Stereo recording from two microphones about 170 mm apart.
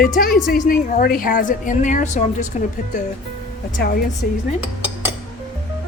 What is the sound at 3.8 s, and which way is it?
Speech, 60° left (ahead or behind).